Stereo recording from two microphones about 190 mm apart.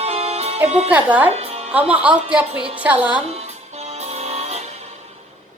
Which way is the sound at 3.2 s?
35° right (ahead or behind).